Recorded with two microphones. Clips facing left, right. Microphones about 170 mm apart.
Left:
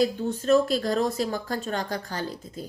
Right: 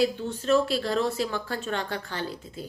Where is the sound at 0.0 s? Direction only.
40° left (ahead or behind).